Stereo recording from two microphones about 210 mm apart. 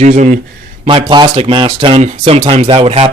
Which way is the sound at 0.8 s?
25° right (ahead or behind).